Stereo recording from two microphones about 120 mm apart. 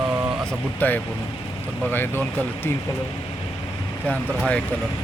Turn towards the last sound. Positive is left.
turn(degrees=10)  # may be behind; listen again after turning